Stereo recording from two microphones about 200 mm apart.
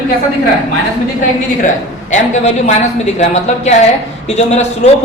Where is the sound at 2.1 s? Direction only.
35° left (ahead or behind).